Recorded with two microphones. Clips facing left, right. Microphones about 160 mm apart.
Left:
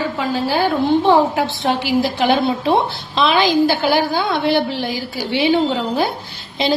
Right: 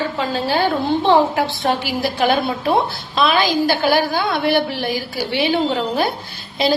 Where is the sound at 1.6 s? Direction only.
15° left (ahead or behind).